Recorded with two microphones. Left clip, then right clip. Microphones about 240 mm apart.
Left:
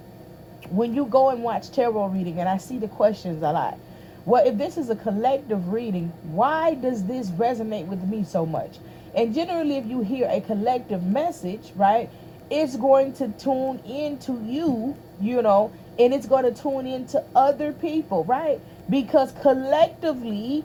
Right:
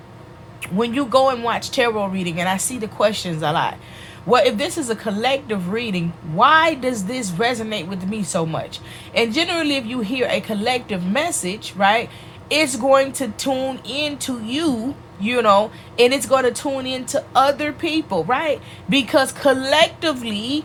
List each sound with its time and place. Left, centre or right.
0.8 s speech: right